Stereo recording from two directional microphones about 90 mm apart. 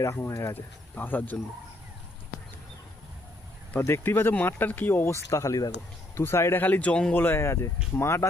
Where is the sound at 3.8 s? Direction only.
25° left (ahead or behind).